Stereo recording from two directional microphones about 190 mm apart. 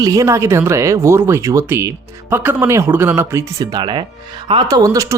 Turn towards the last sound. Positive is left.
turn(degrees=-15)  # may be behind; listen again after turning